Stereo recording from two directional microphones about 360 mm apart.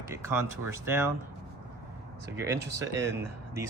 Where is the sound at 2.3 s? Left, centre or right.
Centre.